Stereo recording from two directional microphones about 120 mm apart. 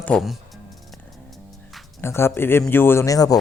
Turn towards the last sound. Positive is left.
turn(degrees=30)  # may be behind; listen again after turning